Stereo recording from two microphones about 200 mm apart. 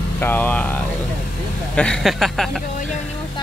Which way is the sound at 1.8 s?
5° left (ahead or behind).